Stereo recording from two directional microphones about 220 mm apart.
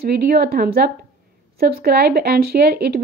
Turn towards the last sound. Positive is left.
turn(degrees=-45)  # may be behind; listen again after turning